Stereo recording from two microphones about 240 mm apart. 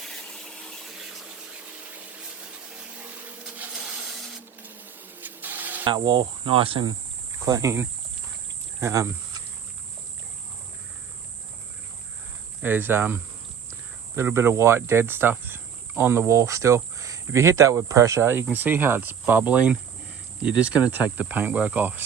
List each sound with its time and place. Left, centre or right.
0.0 s a sound: centre
5.2 s printer: centre
5.8 s speech: centre
12.6 s speech: centre